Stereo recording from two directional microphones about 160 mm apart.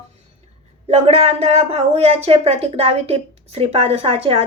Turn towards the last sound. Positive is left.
turn(degrees=-35)  # may be behind; listen again after turning